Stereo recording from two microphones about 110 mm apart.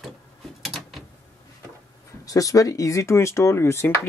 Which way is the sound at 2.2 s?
30° left (ahead or behind).